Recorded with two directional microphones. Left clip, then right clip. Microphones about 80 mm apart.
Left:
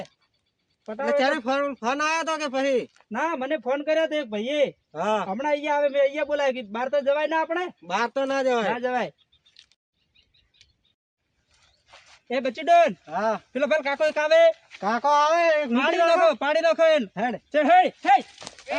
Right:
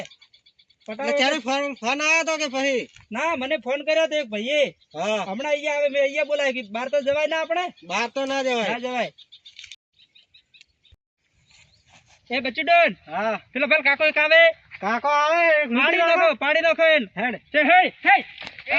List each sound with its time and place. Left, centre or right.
1.0 s a man's voice: centre
3.1 s a man's voice: left
4.9 s a man's voice: centre
5.5 s a man's voice: left
6.3 s a man's voice: left
8.1 s a man's voice: centre
8.7 s speech: left
11.9 s a sound: left
13.1 s a man's voice: centre
13.5 s speech: left
14.0 s speech: left
14.8 s speech: right
15.7 s a man's voice: centre
17.5 s speech: left